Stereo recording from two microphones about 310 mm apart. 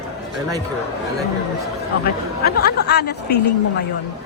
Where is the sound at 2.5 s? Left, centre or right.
Left.